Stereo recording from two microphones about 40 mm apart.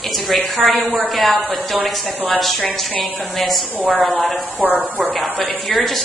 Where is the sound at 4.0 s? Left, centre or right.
Left.